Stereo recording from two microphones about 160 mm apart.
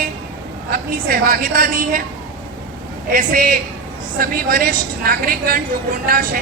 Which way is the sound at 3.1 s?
60° right (ahead or behind).